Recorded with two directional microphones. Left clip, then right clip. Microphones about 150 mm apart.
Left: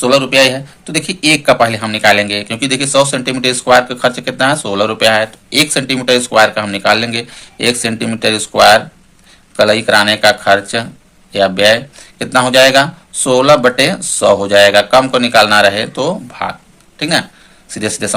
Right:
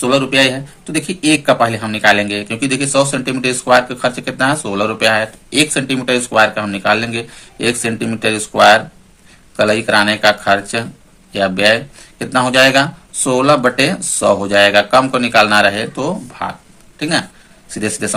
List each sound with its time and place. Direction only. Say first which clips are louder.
0.0 s speech: left 3 dB; 20° left (ahead or behind)